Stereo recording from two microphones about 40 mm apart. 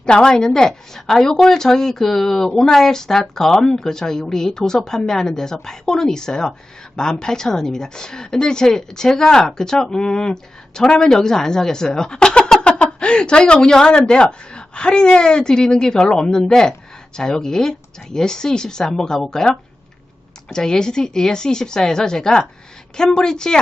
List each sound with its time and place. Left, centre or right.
0.0 s a woman's voice: centre